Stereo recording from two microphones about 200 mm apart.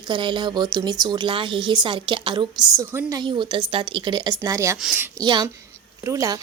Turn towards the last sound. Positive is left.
turn(degrees=-15)  # may be behind; listen again after turning